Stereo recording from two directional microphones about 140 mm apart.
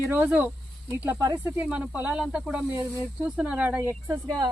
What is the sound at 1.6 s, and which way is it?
Speech, 10° right (ahead or behind).